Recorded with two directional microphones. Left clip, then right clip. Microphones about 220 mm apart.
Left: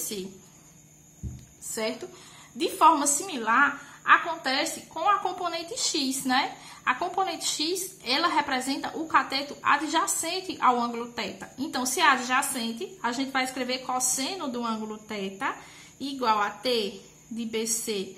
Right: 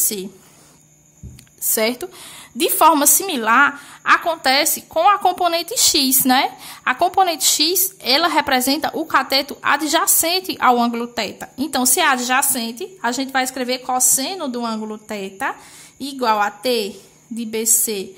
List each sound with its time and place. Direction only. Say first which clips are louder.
1.8 s a woman's voice: right 11 dB; 45° right (ahead or behind)